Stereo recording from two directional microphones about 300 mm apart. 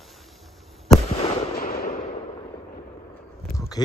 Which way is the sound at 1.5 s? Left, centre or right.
Left.